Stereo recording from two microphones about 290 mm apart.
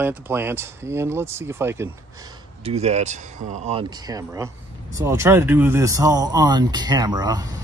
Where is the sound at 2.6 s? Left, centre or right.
Right.